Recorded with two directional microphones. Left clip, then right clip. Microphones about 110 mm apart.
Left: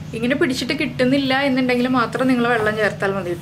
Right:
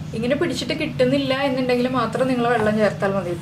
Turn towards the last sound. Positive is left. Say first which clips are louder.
# even
turn(degrees=25)  # may be behind; listen again after turning